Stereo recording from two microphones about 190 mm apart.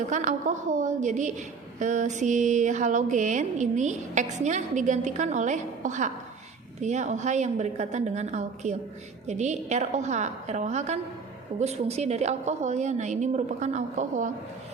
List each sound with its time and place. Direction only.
0.1 s a woman's voice: 40° right (ahead or behind)